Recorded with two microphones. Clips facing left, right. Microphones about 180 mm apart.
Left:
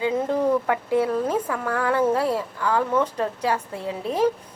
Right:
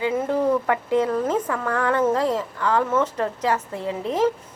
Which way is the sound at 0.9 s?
15° left (ahead or behind).